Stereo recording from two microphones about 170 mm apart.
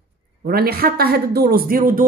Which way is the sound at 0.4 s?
65° right (ahead or behind).